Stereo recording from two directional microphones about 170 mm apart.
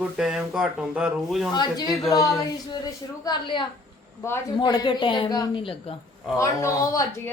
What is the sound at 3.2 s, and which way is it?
A woman's voice, 25° left (ahead or behind).